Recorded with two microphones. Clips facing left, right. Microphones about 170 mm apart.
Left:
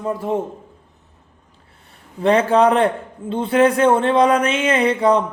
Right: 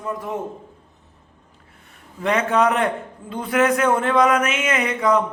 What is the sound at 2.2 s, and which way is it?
Speech, 30° left (ahead or behind).